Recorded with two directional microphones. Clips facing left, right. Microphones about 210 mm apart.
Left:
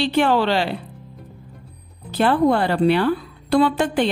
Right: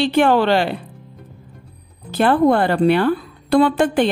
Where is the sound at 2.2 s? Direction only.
50° right (ahead or behind).